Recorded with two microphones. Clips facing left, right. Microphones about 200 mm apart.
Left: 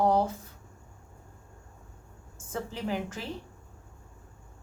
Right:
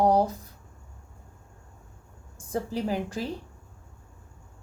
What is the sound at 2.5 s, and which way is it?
Speech, 35° right (ahead or behind).